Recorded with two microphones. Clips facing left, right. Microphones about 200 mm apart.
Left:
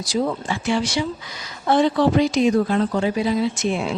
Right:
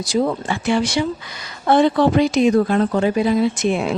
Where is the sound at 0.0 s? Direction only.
55° right (ahead or behind).